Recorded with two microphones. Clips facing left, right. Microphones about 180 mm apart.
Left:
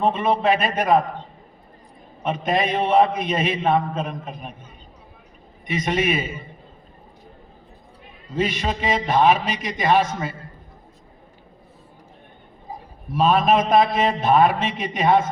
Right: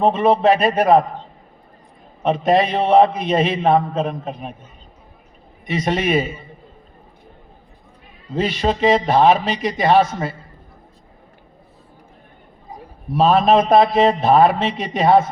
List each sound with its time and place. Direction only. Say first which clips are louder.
0.0 s a man's voice: right 5 dB; 35° right (ahead or behind)
2.2 s a man's voice: right 6 dB; 35° right (ahead or behind)
5.6 s a man's voice: right 2 dB; 35° right (ahead or behind)
8.4 s a man's voice: right 5 dB; 35° right (ahead or behind)
13.1 s a man's voice: right 4 dB; 40° right (ahead or behind)